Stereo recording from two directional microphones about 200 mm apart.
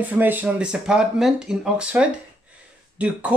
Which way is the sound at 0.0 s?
10° right (ahead or behind).